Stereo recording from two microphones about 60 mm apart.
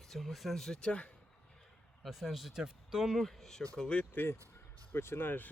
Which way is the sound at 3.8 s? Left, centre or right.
Centre.